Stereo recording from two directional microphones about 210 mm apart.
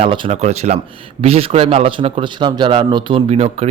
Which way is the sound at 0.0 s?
25° right (ahead or behind).